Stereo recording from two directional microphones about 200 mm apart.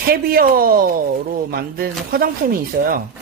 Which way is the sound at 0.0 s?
50° right (ahead or behind).